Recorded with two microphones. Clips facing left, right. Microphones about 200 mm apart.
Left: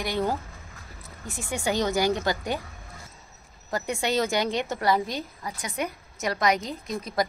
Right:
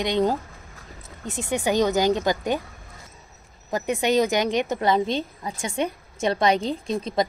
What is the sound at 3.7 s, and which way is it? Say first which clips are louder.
A woman's voice: right 5 dB; 20° right (ahead or behind).